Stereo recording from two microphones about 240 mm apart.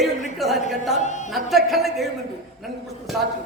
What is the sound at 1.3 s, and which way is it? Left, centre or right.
Speech, centre.